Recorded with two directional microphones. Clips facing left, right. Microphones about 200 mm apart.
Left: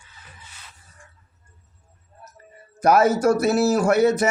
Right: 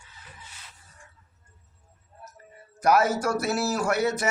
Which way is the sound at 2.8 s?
25° left (ahead or behind).